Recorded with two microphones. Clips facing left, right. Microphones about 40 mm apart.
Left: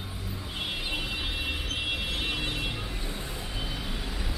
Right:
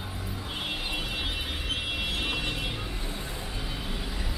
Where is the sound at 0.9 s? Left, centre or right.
Centre.